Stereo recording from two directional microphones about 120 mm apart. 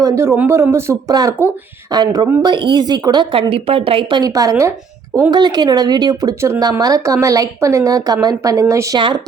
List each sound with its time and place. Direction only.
0.0 s a woman's voice: 25° right (ahead or behind)
3.3 s a woman's voice: 50° right (ahead or behind)
4.2 s a woman's voice: 30° right (ahead or behind)
9.0 s speech: 40° right (ahead or behind)